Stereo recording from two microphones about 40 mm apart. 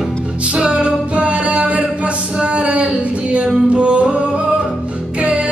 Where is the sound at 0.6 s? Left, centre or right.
Right.